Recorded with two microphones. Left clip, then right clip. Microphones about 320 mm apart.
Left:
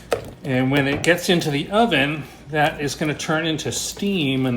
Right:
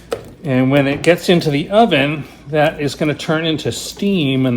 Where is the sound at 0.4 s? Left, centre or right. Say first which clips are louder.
Right 7 dB; centre.